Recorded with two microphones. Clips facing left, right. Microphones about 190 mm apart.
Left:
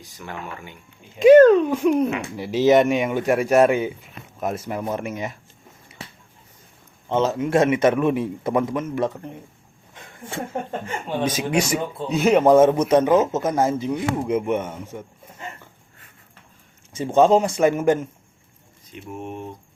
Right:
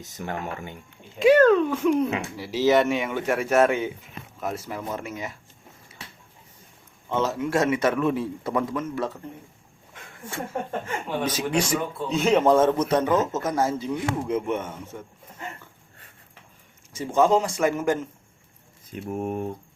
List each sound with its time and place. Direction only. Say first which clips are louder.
0.2 s speech: right 3 dB; 40° right (ahead or behind)
1.4 s a man's voice: left 5 dB; 20° left (ahead or behind)
7.1 s a man's voice: left 4 dB; 20° left (ahead or behind)
10.2 s a man's voice: left 2 dB; 25° left (ahead or behind)
17.2 s a man's voice: left 4 dB; 25° left (ahead or behind)
19.1 s speech: right 4 dB; 45° right (ahead or behind)